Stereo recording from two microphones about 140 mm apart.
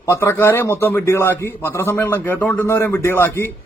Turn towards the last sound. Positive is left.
turn(degrees=15)  # may be behind; listen again after turning